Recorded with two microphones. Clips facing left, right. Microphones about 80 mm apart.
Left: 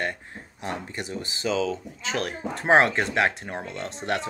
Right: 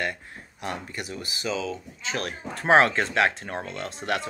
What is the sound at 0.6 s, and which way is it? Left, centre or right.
Speech, left.